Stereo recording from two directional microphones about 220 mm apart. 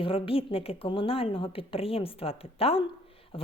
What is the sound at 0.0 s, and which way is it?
A woman's voice, 25° left (ahead or behind).